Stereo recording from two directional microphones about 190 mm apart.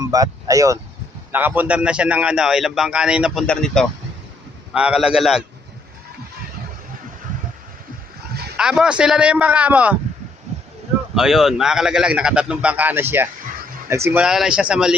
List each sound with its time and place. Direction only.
0.0 s speech: 20° right (ahead or behind); by 5.4 s centre (ahead or behind)
8.5 s speech: 5° right (ahead or behind)
11.1 s speech: centre (ahead or behind)